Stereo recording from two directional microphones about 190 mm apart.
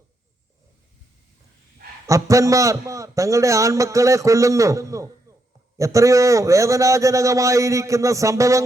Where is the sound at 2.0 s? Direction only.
15° right (ahead or behind).